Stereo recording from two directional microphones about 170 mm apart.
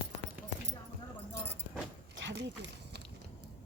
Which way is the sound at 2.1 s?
90° right.